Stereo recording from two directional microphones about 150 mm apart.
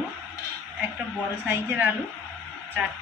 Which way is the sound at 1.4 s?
10° right (ahead or behind).